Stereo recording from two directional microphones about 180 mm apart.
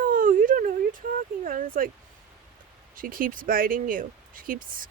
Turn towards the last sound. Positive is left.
turn(degrees=-50)  # may be behind; listen again after turning